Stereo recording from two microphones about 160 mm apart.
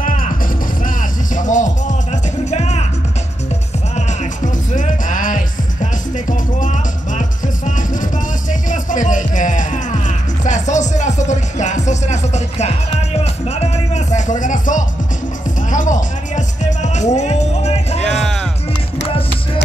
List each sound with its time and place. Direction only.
0.0 s music: 55° left (ahead or behind)
4.7 s music: 55° left (ahead or behind)
18.0 s music: 5° left (ahead or behind)